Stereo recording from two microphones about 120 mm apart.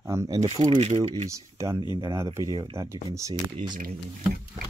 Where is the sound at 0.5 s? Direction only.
40° right (ahead or behind).